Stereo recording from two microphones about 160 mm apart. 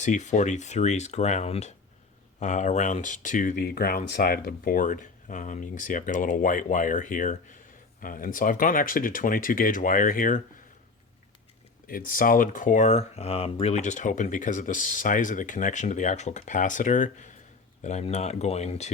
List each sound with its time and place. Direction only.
0.0 s speech: 50° left (ahead or behind)
11.9 s speech: 60° left (ahead or behind); by 18.9 s 45° left (ahead or behind)